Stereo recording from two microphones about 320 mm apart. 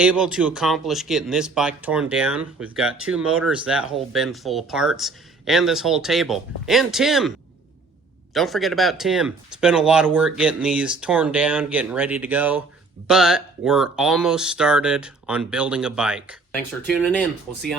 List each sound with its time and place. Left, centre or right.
0.0 s speech: centre